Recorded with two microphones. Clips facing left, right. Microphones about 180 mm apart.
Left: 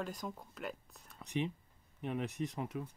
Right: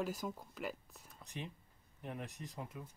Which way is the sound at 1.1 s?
75° left (ahead or behind).